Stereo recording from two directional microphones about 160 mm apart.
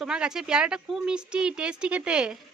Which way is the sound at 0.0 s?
5° right (ahead or behind).